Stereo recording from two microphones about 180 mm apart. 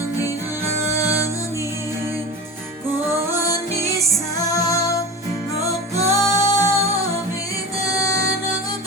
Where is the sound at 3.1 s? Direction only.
15° right (ahead or behind).